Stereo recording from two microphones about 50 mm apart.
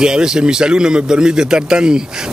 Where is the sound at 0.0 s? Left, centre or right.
Centre.